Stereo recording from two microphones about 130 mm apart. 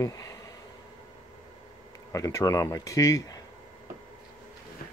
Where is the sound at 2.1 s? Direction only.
25° left (ahead or behind).